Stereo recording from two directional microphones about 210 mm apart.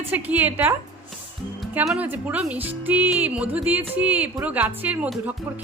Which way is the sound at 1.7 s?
5° right (ahead or behind).